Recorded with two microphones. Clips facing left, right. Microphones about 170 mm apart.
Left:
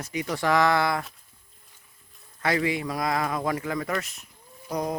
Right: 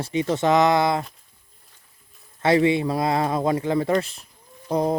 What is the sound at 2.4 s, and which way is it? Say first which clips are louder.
Speech: right 7 dB; 25° right (ahead or behind).